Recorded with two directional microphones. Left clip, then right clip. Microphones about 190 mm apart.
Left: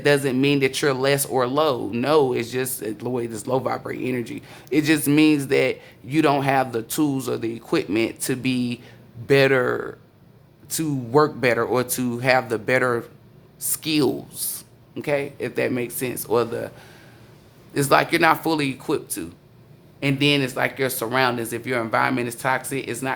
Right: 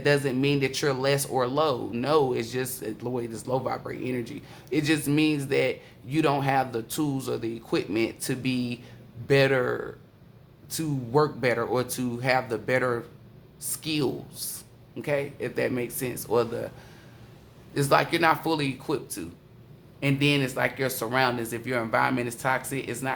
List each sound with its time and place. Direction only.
0.0 s speech: 30° left (ahead or behind)
17.7 s speech: 35° left (ahead or behind)